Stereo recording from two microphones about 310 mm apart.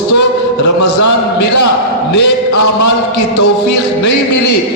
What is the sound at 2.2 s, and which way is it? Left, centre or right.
Speech, left.